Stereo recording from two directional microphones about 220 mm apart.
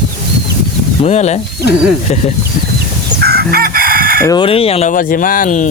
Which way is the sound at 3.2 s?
45° right (ahead or behind).